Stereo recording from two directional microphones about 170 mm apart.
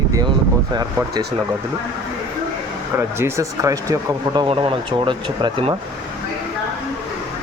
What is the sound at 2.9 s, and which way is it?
Speech, 15° right (ahead or behind).